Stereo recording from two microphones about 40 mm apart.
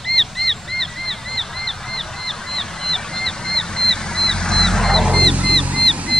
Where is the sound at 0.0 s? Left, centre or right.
Centre.